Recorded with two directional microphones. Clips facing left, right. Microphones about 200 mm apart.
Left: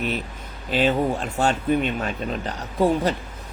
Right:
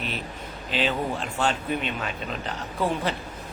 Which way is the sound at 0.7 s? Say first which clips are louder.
Left 6 dB; 45° left (ahead or behind).